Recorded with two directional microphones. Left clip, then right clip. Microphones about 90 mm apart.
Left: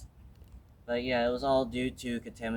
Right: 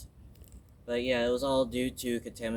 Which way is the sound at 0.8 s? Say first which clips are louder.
Even; 40° left (ahead or behind).